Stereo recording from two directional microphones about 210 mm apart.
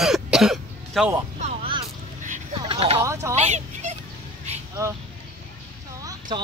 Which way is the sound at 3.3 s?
30° right (ahead or behind).